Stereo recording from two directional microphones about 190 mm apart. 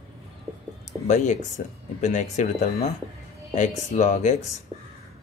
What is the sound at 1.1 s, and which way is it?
Speech, 40° left (ahead or behind).